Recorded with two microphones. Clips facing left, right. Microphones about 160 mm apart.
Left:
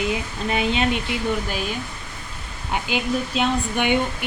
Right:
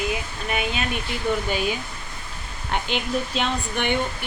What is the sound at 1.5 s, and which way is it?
Speech, centre (ahead or behind).